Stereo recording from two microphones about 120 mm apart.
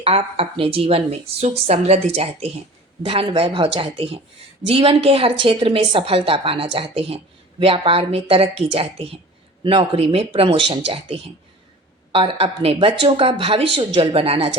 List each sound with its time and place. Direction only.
0.0 s a woman's voice: 55° right (ahead or behind)